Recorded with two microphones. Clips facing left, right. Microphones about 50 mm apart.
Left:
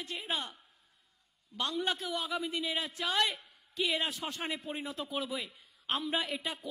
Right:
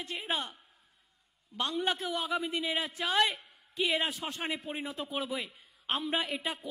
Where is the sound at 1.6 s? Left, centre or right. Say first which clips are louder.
Right 2 dB; centre.